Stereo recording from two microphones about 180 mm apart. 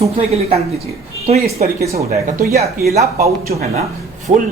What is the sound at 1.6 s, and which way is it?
Speech, 45° right (ahead or behind).